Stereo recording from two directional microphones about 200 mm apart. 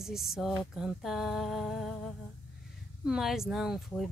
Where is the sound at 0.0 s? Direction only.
Centre (ahead or behind).